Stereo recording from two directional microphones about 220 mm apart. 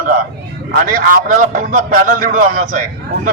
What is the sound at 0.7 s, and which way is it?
A man's voice, 40° right (ahead or behind).